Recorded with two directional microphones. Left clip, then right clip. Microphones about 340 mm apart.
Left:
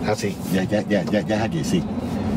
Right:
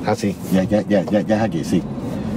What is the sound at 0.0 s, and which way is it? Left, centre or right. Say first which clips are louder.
Speech: right 3 dB; centre.